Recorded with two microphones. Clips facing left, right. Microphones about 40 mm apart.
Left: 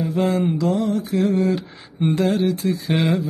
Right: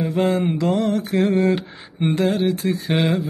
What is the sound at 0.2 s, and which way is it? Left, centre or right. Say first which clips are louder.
Mantra: right 1 dB; centre.